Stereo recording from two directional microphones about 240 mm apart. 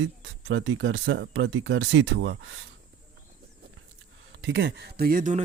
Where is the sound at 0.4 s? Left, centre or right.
Right.